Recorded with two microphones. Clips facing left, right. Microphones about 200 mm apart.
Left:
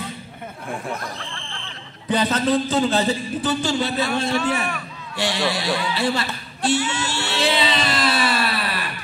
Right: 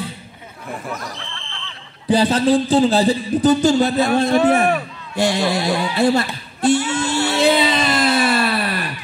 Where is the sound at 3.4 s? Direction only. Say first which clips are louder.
Right 9 dB; 45° right (ahead or behind).